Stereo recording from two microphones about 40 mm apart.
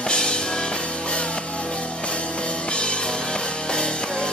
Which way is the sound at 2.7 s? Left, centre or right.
Left.